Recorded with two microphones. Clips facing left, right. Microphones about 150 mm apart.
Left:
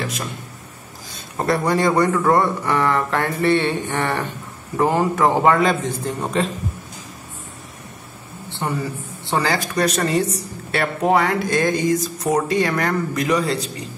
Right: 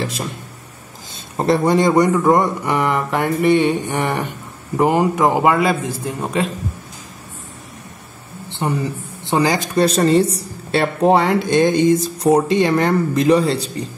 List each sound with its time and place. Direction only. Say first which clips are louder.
1.1 s a man's voice: right 4 dB; 25° right (ahead or behind)
8.5 s a sound: right 3 dB; 20° right (ahead or behind)
9.2 s speech: right 4 dB; 20° right (ahead or behind)